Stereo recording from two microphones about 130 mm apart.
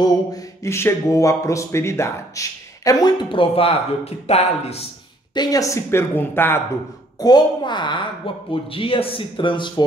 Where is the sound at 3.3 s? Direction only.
45° left (ahead or behind).